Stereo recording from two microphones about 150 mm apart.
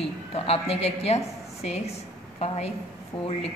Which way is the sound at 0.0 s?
40° left (ahead or behind).